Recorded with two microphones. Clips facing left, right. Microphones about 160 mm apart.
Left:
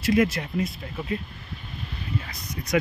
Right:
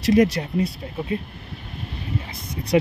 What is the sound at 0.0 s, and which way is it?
Speech, 35° right (ahead or behind).